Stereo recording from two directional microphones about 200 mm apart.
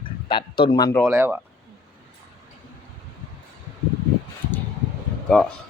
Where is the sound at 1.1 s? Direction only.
10° right (ahead or behind).